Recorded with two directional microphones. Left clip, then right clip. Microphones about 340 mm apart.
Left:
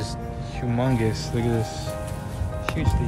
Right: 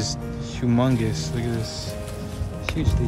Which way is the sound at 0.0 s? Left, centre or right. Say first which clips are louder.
Right 3 dB; centre.